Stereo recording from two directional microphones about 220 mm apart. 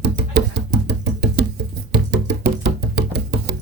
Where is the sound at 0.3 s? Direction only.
50° right (ahead or behind).